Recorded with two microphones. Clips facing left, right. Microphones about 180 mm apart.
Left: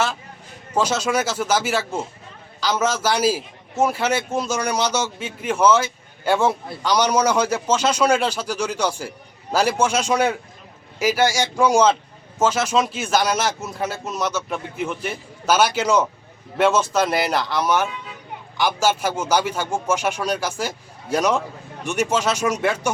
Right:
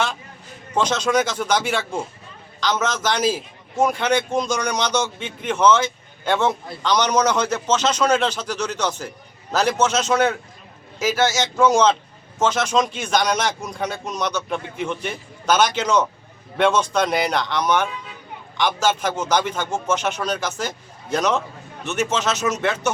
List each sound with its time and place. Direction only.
0.7 s a man's voice: 10° left (ahead or behind)